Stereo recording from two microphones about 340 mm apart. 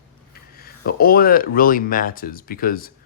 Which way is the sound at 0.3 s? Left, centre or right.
Left.